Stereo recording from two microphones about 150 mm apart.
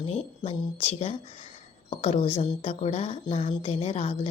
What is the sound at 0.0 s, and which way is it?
Speech, 45° left (ahead or behind).